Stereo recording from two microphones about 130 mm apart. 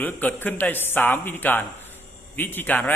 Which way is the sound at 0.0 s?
15° left (ahead or behind).